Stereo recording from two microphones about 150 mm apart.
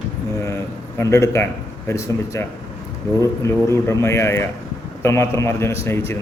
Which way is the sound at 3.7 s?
20° left (ahead or behind).